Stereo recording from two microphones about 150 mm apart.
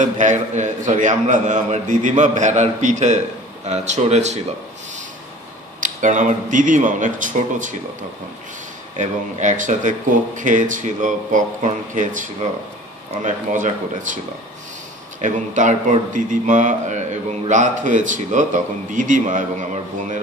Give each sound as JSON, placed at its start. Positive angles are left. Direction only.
{"t": 0.0, "sound": "a man's voice", "side_deg": -55}
{"t": 5.8, "sound": "a man's voice", "side_deg": -55}
{"t": 8.9, "sound": "a man's voice", "side_deg": -55}
{"t": 15.2, "sound": "a man's voice", "side_deg": -55}